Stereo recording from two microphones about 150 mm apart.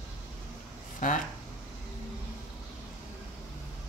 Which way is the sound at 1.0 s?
60° left (ahead or behind).